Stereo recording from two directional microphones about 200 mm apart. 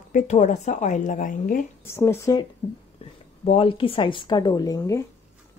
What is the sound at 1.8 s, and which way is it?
Speech, 10° left (ahead or behind).